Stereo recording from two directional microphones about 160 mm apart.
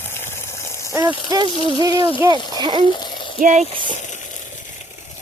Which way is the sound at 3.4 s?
50° right (ahead or behind).